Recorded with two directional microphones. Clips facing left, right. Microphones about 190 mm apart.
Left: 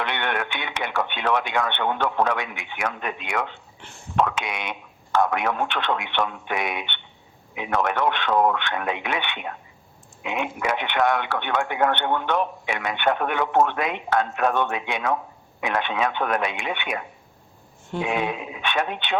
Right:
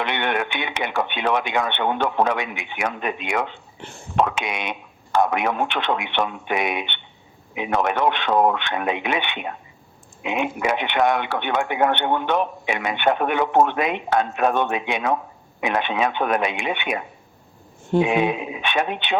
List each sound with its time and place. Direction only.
0.0 s speech: 20° right (ahead or behind)
18.0 s speech: 20° right (ahead or behind)